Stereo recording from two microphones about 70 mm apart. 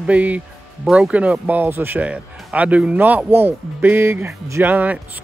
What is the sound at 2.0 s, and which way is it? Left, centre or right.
Speech, centre.